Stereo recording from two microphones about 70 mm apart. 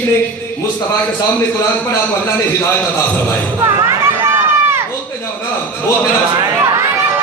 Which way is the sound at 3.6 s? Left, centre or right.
Right.